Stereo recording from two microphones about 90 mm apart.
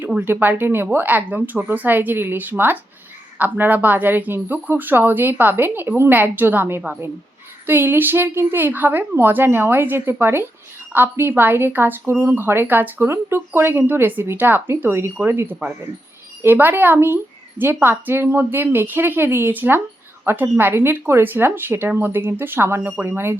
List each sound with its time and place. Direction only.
0.2 s a woman's voice: 20° right (ahead or behind)